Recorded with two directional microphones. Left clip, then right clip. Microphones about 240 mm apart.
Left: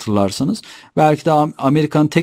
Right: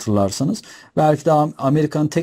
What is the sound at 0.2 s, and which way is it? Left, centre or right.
Speech, centre.